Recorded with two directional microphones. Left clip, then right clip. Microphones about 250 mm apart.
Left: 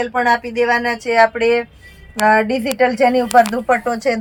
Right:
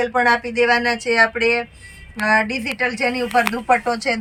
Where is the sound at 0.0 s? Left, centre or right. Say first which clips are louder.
Left 1 dB; centre.